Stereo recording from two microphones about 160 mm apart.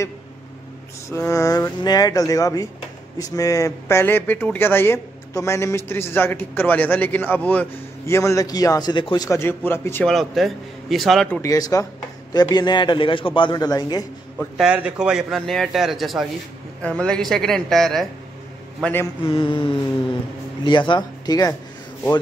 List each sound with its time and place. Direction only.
1.0 s speech: 20° left (ahead or behind)
10.1 s a man's voice: centre (ahead or behind)
11.2 s speech: 15° left (ahead or behind)
14.6 s a man's voice: 5° right (ahead or behind); by 19.0 s 10° left (ahead or behind)
19.2 s mantra: 35° left (ahead or behind)
20.6 s speech: 30° left (ahead or behind)